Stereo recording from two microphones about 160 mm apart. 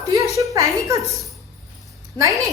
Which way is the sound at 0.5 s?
20° right (ahead or behind).